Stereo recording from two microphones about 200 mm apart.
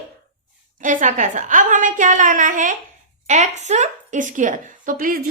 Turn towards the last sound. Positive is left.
turn(degrees=-45)  # may be behind; listen again after turning